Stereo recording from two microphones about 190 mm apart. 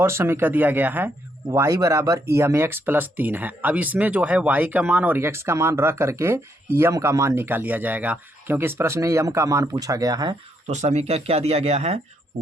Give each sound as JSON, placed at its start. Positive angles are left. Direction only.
{"t": 0.0, "sound": "speech", "side_deg": -15}
{"t": 10.7, "sound": "speech", "side_deg": -35}